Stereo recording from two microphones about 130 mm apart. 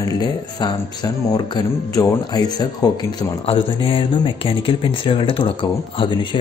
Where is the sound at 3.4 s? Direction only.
45° left (ahead or behind).